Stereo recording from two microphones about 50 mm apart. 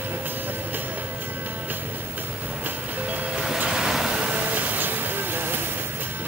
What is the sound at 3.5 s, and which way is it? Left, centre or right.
Vehicle, centre.